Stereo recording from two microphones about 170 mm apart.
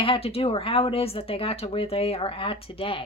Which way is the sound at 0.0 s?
35° left (ahead or behind).